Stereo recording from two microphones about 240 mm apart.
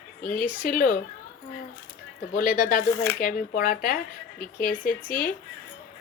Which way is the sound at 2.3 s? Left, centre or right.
Left.